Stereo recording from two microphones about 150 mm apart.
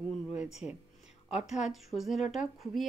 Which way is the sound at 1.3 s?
50° left (ahead or behind).